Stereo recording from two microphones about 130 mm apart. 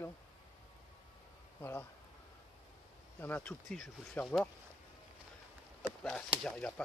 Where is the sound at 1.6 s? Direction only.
15° left (ahead or behind).